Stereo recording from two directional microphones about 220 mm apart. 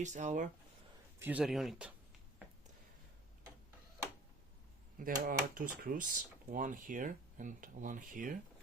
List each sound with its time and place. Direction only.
0.0 s speech: 35° right (ahead or behind)
1.2 s speech: 5° right (ahead or behind)
4.9 s speech: 40° right (ahead or behind)